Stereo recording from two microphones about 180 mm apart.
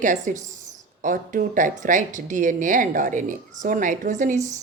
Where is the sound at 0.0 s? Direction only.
45° right (ahead or behind).